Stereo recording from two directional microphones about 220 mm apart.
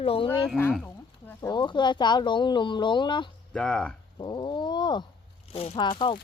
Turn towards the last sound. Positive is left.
turn(degrees=25)  # may be behind; listen again after turning